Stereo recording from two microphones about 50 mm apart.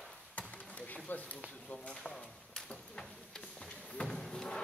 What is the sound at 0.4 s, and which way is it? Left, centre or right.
Chop, left.